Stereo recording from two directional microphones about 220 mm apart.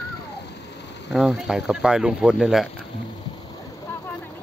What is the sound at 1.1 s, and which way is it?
Speech, 5° right (ahead or behind).